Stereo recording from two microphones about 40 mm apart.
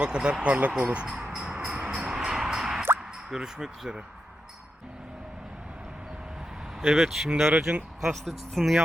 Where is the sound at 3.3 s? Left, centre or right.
Centre.